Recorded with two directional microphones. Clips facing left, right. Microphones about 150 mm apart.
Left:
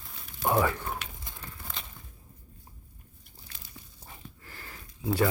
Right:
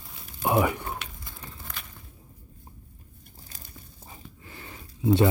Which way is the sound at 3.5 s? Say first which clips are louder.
Right 2 dB; 45° right (ahead or behind).